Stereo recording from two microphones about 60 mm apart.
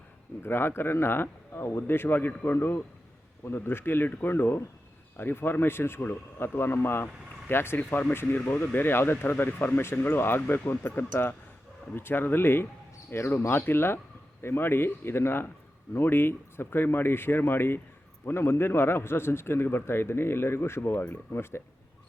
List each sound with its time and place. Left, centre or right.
0.4 s speech: left